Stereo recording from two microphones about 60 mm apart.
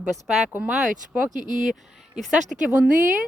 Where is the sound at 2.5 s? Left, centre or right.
Centre.